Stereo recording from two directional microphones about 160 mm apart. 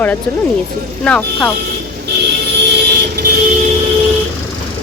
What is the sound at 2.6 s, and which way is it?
Vehicle, 90° right.